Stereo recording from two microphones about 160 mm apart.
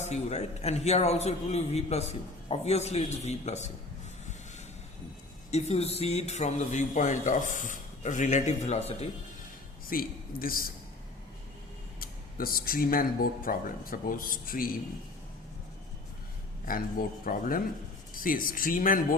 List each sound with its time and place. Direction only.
0.0 s a man's voice: 45° left (ahead or behind)
5.5 s a man's voice: 45° left (ahead or behind)
9.9 s speech: 65° left (ahead or behind)
11.9 s speech: 65° left (ahead or behind)
16.6 s speech: 60° left (ahead or behind)